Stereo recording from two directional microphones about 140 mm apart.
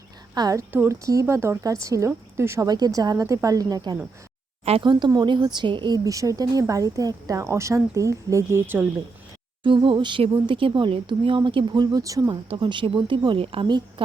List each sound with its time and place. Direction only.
0.3 s speech: 25° right (ahead or behind)
4.6 s speech: 45° right (ahead or behind)
4.9 s speech: 30° right (ahead or behind); by 8.9 s 15° right (ahead or behind)
9.6 s speech: 35° right (ahead or behind)
12.5 s speech: 35° right (ahead or behind)